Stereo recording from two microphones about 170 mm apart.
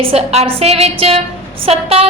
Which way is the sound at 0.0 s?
35° right (ahead or behind).